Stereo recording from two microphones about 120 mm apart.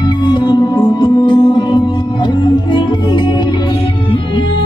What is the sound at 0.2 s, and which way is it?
Music, 40° left (ahead or behind).